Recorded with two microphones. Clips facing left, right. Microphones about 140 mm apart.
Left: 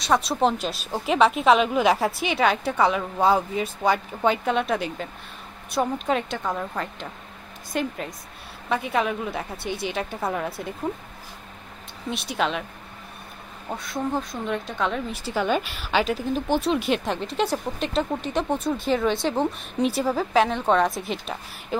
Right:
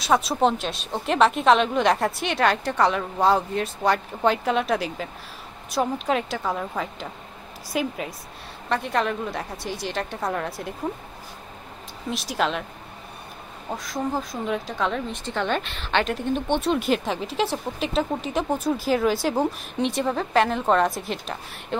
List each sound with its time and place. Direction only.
0.0 s speech: centre (ahead or behind)
12.1 s speech: centre (ahead or behind)
13.7 s speech: centre (ahead or behind)